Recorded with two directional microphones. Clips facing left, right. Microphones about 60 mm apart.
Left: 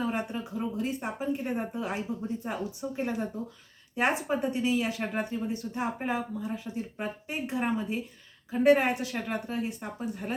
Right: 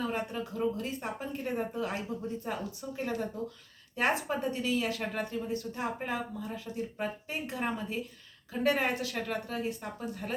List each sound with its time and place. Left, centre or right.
0.0 s speech: centre